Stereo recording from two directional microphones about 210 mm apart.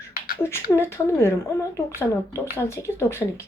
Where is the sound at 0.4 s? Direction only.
10° left (ahead or behind).